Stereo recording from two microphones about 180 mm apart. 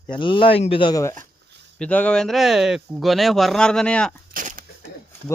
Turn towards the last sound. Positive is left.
turn(degrees=-50)  # may be behind; listen again after turning